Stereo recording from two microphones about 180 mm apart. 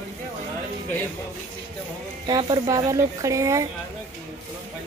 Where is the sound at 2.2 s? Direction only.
25° right (ahead or behind).